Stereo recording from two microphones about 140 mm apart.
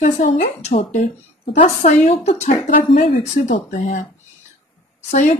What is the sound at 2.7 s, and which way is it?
Speech, 90° left.